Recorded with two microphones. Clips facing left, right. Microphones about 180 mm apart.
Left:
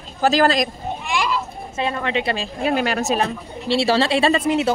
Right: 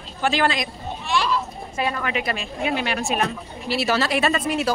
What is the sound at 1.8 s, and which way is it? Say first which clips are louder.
Speech: left 2 dB; 25° left (ahead or behind).